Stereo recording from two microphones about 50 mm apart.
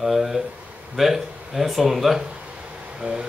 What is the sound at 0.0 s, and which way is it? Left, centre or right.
Speech, centre.